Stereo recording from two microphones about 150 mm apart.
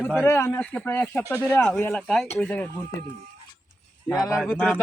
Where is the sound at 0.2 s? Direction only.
15° left (ahead or behind).